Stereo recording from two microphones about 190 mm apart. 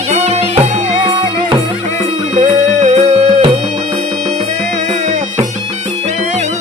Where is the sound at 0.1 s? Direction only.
35° right (ahead or behind).